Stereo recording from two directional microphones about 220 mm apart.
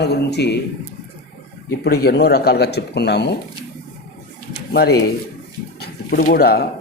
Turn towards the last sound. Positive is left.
turn(degrees=45)  # may be behind; listen again after turning